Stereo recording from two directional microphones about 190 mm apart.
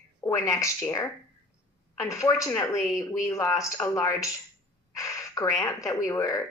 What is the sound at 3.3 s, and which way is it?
Speech, 15° left (ahead or behind).